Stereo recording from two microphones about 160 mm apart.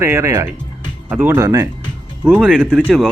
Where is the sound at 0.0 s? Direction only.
15° right (ahead or behind).